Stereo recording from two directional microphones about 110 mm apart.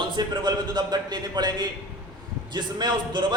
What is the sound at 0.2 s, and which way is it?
A man's voice, 40° right (ahead or behind).